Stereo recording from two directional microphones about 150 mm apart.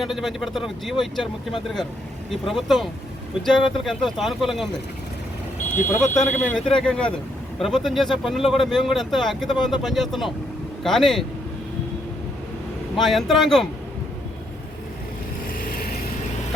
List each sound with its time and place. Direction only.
0.0 s speech: centre (ahead or behind)
2.5 s speech: centre (ahead or behind)
6.0 s speech: 10° left (ahead or behind)
13.0 s speech: centre (ahead or behind)
15.5 s vehicle: 70° left (ahead or behind)